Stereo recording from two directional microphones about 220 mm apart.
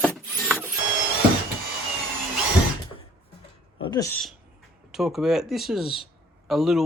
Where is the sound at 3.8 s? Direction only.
20° left (ahead or behind).